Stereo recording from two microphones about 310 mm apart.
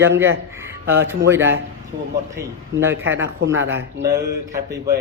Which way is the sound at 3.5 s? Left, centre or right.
Right.